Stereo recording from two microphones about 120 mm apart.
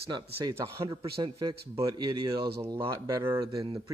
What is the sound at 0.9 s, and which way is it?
Speech, 50° right (ahead or behind).